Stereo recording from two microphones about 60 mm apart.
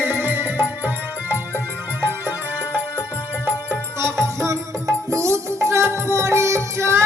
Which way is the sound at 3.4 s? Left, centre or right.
Right.